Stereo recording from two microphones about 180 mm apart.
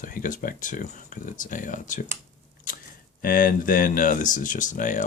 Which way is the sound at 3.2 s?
50° left (ahead or behind).